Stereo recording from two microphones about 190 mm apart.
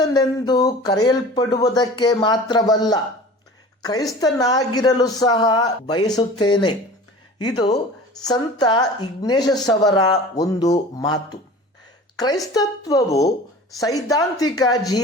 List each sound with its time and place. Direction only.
0.0 s speech: 20° left (ahead or behind)
4.2 s a woman's voice: 20° left (ahead or behind)